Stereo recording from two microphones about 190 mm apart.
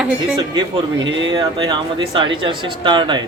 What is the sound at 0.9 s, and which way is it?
Speech, 80° right.